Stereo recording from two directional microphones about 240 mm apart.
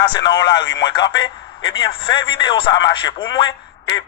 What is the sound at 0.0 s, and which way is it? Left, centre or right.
Speech, centre.